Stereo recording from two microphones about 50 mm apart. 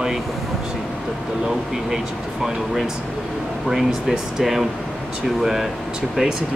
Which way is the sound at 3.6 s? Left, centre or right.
Centre.